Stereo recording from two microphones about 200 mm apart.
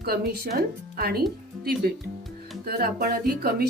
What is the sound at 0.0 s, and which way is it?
Speech, 50° right (ahead or behind).